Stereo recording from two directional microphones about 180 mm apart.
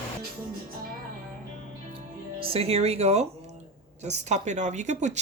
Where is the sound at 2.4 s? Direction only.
30° right (ahead or behind).